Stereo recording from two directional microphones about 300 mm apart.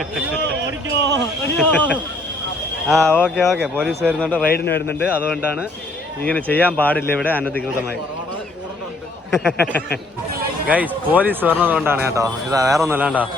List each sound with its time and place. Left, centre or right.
0.9 s a man's voice: right
1.2 s speech: centre
4.4 s a man's voice: left
5.0 s speech: centre
9.3 s speech: centre